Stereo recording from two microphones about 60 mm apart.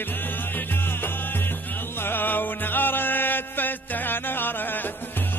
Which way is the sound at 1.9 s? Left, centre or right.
Left.